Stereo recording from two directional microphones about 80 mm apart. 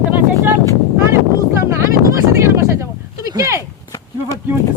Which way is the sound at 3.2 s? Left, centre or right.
Right.